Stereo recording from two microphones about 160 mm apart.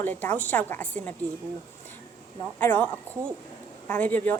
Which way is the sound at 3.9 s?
10° left (ahead or behind).